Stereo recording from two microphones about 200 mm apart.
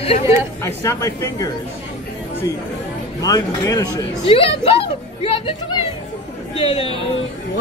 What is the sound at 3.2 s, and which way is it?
A man's voice, 20° left (ahead or behind).